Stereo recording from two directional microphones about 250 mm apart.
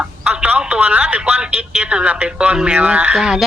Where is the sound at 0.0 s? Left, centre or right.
Centre.